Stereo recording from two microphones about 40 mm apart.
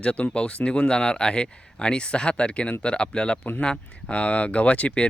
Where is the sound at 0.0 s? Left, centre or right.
Left.